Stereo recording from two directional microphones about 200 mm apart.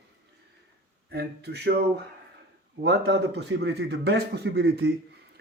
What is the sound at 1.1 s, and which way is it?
A man's voice, 55° right (ahead or behind).